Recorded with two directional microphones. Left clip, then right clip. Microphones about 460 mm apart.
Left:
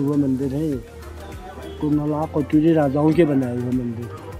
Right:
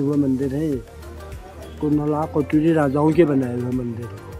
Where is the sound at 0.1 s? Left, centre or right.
Centre.